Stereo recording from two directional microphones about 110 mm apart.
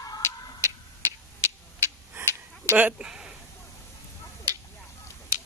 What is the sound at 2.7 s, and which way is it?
Speech, 10° right (ahead or behind).